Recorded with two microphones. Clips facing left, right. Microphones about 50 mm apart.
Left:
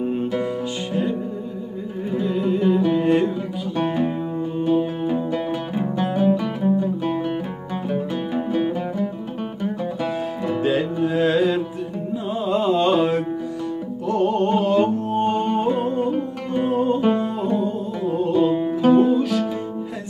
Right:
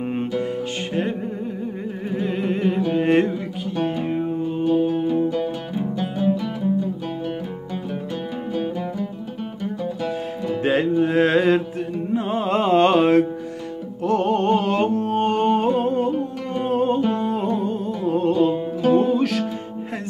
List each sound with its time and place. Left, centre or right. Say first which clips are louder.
0.0 s music: left 2 dB; right
2.1 s music: left 2 dB; right
4.6 s music: right 2 dB; left
10.6 s music: right 3 dB; right
16.7 s music: right 2 dB; right
17.0 s music: left 2 dB; left
17.6 s music: even; right
18.8 s music: left 2 dB; left
19.0 s music: left 1 dB; right